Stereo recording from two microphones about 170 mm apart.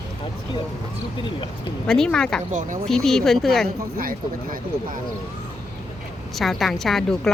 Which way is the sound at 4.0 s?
55° right (ahead or behind).